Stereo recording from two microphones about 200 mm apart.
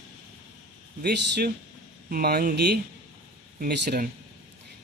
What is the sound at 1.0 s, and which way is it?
A man's voice, 55° right (ahead or behind).